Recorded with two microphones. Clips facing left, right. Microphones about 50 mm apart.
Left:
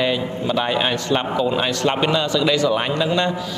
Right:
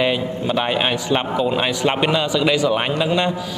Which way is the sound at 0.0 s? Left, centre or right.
Centre.